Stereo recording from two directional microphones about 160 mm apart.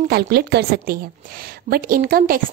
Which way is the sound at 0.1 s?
85° right.